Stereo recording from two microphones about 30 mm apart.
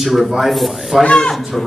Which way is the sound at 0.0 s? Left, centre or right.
Centre.